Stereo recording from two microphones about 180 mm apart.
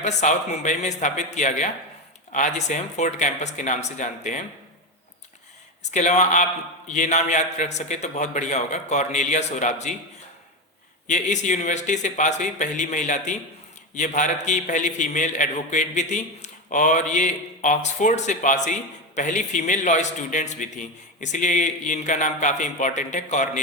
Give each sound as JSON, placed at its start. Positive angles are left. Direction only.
{"t": 0.0, "sound": "a man's voice", "side_deg": 45}
{"t": 5.9, "sound": "a man's voice", "side_deg": 40}
{"t": 11.0, "sound": "a man's voice", "side_deg": 40}